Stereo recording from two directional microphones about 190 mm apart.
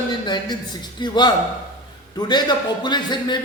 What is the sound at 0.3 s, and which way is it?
A man's voice, 20° left (ahead or behind).